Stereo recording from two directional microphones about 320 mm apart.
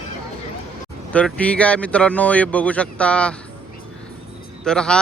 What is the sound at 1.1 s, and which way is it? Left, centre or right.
Speech, centre.